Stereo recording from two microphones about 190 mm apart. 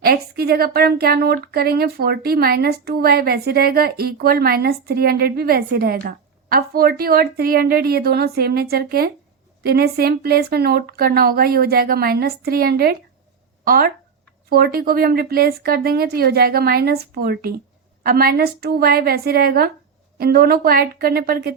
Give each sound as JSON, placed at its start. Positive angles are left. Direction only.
{"t": 0.0, "sound": "speech", "side_deg": -55}